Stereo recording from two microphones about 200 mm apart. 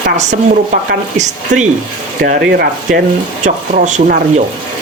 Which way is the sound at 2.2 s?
50° right (ahead or behind).